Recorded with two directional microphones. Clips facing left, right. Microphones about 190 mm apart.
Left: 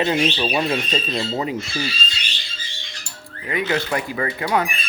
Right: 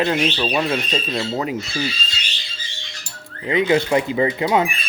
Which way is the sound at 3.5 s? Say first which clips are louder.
Right 6 dB; 20° right (ahead or behind).